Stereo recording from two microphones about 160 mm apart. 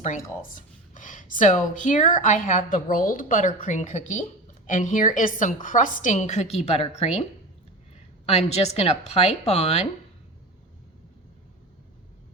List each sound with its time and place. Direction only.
0.0 s speech: 50° left (ahead or behind)
8.3 s a woman's voice: 40° left (ahead or behind)